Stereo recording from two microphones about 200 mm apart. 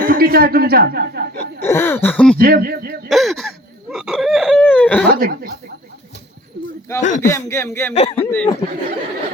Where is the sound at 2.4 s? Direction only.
50° right (ahead or behind).